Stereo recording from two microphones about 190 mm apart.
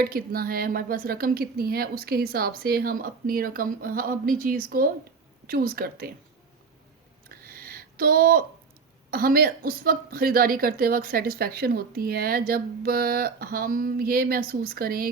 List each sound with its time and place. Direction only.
0.0 s a woman's voice: 50° right (ahead or behind)
7.3 s a sound: 55° right (ahead or behind)
9.0 s a woman's voice: 50° right (ahead or behind)